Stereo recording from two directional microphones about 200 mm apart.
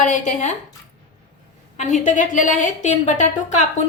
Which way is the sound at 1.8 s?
40° left (ahead or behind).